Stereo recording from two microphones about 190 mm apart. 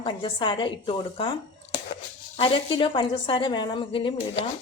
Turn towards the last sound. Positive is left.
turn(degrees=25)  # may be behind; listen again after turning